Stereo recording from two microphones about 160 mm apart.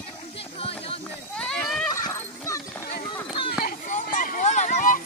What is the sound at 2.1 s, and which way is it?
Dog, 20° left (ahead or behind).